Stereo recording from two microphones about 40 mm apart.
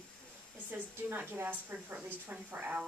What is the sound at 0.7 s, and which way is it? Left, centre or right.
Speech, right.